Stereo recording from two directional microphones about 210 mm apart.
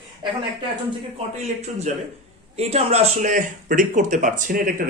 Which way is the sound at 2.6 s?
30° right (ahead or behind).